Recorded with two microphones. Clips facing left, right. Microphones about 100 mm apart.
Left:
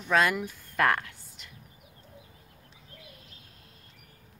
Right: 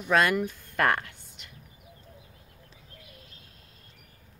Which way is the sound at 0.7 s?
Centre (ahead or behind).